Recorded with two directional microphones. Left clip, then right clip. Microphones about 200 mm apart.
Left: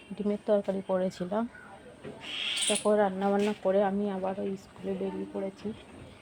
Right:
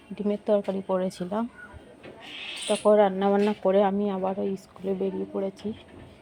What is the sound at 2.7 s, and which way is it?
Speech, 20° right (ahead or behind).